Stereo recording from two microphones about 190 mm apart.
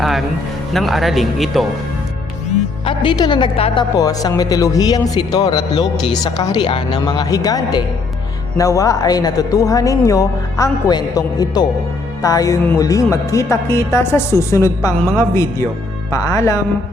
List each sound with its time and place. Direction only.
0.7 s speech: centre (ahead or behind)
2.8 s speech: 25° left (ahead or behind)